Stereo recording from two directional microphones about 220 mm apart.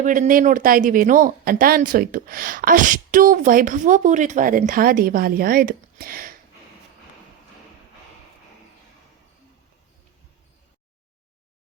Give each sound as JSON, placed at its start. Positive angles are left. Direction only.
{"t": 0.0, "sound": "speech", "side_deg": -35}